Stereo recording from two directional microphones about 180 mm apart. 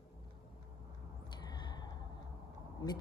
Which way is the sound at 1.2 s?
25° left (ahead or behind).